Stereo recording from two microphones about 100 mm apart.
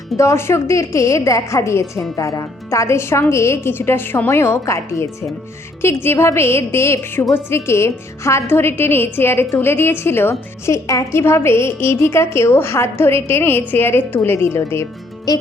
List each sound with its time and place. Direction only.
0.2 s a woman's voice: 30° left (ahead or behind)